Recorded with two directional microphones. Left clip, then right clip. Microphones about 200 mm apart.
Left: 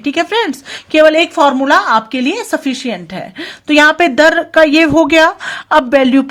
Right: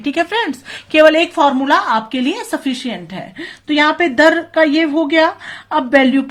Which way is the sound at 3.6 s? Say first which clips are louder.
Left 5 dB; 45° left (ahead or behind).